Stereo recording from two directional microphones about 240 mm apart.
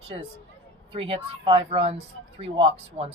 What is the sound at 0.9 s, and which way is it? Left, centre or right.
Speech, right.